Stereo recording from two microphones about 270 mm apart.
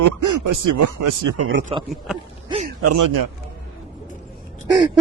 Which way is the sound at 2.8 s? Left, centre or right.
Right.